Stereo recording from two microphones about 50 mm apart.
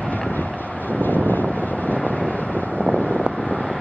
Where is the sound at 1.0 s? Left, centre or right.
Left.